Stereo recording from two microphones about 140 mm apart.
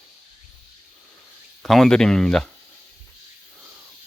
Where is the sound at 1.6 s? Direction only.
5° left (ahead or behind).